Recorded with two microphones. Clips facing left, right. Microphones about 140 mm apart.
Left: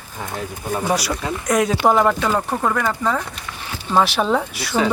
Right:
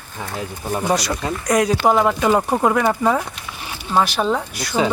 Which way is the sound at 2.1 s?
15° right (ahead or behind).